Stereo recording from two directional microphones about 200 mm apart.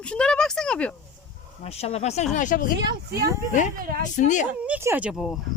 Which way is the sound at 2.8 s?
55° right (ahead or behind).